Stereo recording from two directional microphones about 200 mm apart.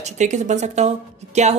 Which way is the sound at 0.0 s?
35° right (ahead or behind).